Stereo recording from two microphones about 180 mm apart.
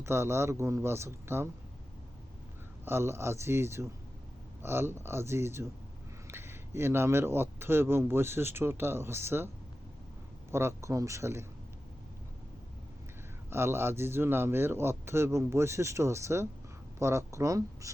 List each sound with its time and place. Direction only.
0.0 s a man's voice: 15° right (ahead or behind)
2.8 s a man's voice: 15° right (ahead or behind)
10.5 s a man's voice: 15° right (ahead or behind)
13.5 s a man's voice: 15° right (ahead or behind)